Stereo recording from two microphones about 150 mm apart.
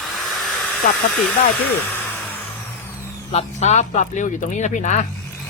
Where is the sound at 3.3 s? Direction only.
50° left (ahead or behind).